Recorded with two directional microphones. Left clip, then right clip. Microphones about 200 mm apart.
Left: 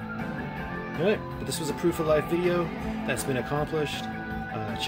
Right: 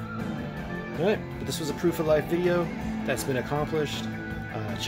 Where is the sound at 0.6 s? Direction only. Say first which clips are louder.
Left 1 dB; 25° right (ahead or behind).